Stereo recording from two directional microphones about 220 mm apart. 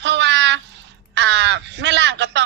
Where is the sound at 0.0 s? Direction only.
55° right (ahead or behind).